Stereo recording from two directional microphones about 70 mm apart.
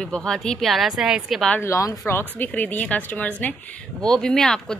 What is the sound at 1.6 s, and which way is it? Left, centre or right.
Speech, left.